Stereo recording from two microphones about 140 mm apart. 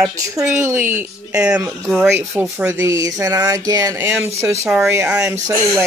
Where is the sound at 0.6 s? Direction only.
20° right (ahead or behind).